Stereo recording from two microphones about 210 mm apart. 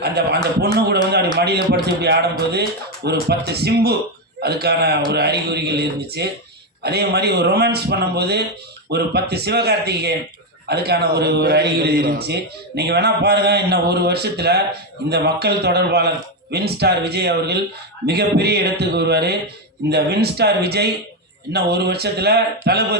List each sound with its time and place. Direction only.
0.0 s a man's voice: 50° right (ahead or behind)
1.5 s a man's voice: 50° right (ahead or behind)